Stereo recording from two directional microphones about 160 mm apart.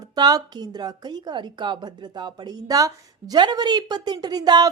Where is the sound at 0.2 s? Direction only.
25° right (ahead or behind).